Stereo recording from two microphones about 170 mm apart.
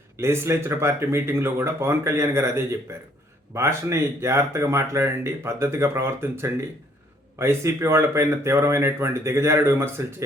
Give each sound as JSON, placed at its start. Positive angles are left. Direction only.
{"t": 0.2, "sound": "speech", "side_deg": -15}